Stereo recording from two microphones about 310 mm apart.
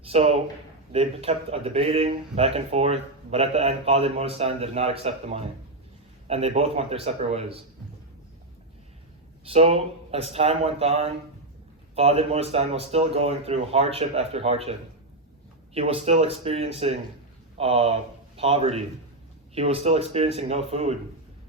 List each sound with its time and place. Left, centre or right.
0.0 s a man's voice: centre
9.5 s speech: centre